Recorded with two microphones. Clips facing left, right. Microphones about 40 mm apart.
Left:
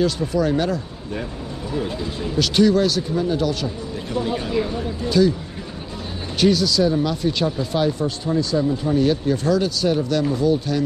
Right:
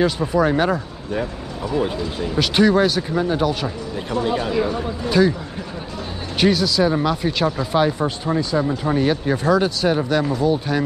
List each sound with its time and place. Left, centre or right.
0.0 s speech: right
2.3 s speech: centre
6.4 s speech: centre
8.6 s speech: right
9.0 s speech: right